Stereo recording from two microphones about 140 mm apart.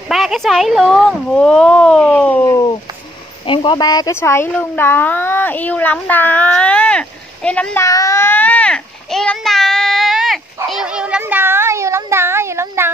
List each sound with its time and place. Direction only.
0.1 s speech: centre (ahead or behind)
2.4 s speech: 25° left (ahead or behind); by 7.8 s 10° left (ahead or behind)
7.8 s a sound: 25° left (ahead or behind); by 12.9 s 20° right (ahead or behind)